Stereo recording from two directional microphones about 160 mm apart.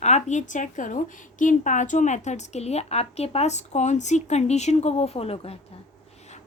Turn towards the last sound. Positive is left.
turn(degrees=40)  # may be behind; listen again after turning